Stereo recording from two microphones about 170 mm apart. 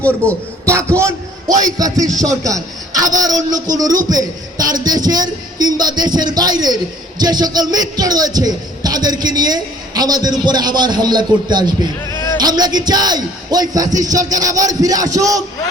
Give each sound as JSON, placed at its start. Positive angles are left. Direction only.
{"t": 0.6, "sound": "a man's voice", "side_deg": -15}